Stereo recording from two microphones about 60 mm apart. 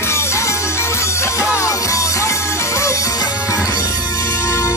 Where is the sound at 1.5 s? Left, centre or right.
Left.